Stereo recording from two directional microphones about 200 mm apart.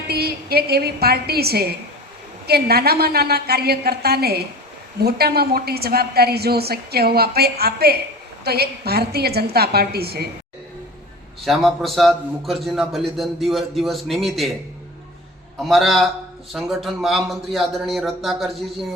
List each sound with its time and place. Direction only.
0.1 s a woman's voice: 50° right (ahead or behind)
11.4 s a man's voice: centre (ahead or behind)
15.6 s a man's voice: centre (ahead or behind)